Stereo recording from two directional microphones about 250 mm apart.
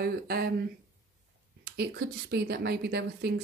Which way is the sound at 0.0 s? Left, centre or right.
Right.